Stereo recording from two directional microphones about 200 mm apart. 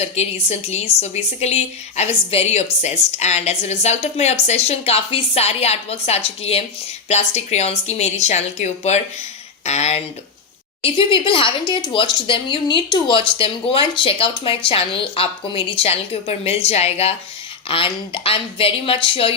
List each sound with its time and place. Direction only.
0.0 s a woman's voice: 30° left (ahead or behind)